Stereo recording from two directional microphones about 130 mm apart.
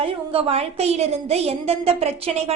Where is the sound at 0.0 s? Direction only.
45° right (ahead or behind).